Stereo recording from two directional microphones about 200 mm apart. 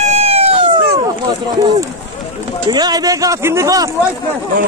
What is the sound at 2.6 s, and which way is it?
A man's voice, 20° right (ahead or behind).